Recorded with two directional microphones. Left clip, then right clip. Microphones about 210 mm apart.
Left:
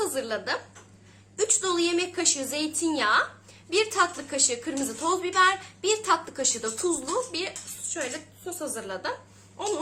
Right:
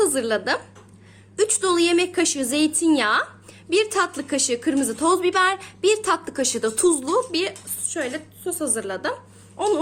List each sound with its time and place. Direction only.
0.0 s a woman's voice: 40° right (ahead or behind)